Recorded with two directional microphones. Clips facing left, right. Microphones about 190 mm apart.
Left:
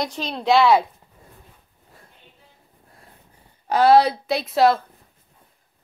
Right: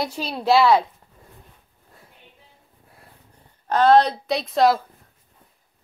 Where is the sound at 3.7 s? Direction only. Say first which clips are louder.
Left 1 dB; 10° left (ahead or behind).